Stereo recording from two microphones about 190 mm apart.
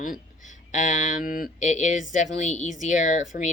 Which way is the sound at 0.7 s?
40° left (ahead or behind).